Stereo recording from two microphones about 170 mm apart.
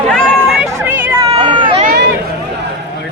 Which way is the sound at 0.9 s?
10° right (ahead or behind).